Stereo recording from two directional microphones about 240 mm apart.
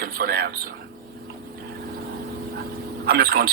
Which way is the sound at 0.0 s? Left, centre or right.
Right.